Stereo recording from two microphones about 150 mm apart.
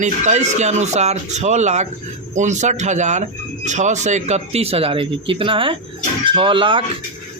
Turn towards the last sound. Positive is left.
turn(degrees=-35)  # may be behind; listen again after turning